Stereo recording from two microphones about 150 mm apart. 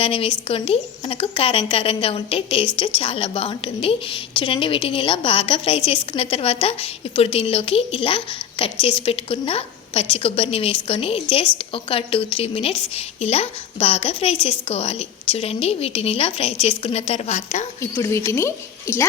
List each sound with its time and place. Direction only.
0.0 s a woman's voice: 40° left (ahead or behind)
17.7 s a woman's voice: 20° left (ahead or behind)